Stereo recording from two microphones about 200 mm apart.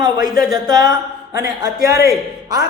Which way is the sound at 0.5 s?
20° right (ahead or behind).